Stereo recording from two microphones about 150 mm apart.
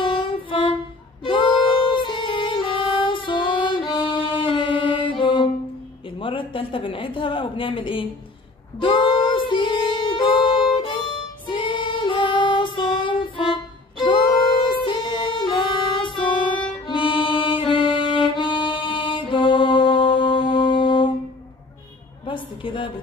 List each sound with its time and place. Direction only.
0.0 s music: 35° left (ahead or behind)
6.0 s a woman's voice: 35° left (ahead or behind)
8.7 s music: 35° left (ahead or behind)
22.2 s a sound: 35° left (ahead or behind)